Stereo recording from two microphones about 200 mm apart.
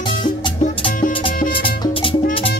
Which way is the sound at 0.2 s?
25° left (ahead or behind).